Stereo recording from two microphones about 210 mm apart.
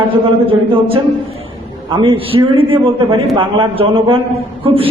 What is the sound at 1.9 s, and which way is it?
A man's voice, 25° right (ahead or behind).